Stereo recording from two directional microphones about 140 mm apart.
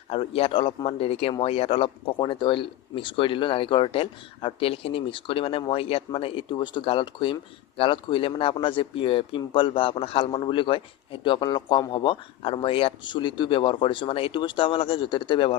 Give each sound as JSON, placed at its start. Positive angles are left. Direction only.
{"t": 0.1, "sound": "speech", "side_deg": 40}